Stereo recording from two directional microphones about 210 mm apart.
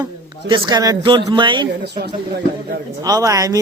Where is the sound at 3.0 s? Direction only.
15° right (ahead or behind).